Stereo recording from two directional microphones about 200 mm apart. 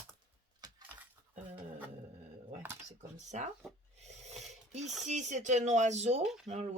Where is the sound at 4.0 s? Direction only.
35° right (ahead or behind).